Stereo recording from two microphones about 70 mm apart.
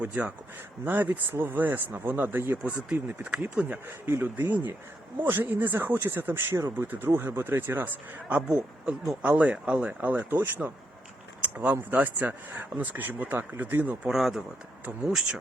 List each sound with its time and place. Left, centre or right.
0.0 s speech: centre
2.7 s speech: centre
3.8 s speech: right
8.4 s speech: centre
14.0 s speech: centre